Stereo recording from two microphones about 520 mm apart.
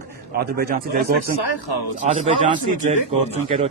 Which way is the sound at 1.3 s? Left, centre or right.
Left.